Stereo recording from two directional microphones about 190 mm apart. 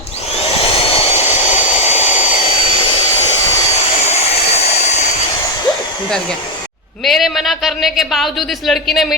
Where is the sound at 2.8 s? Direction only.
25° left (ahead or behind).